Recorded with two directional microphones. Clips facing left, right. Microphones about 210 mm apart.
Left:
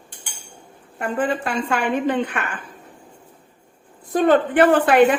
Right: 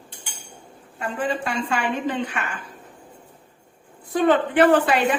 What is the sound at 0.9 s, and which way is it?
A woman's voice, 55° left (ahead or behind).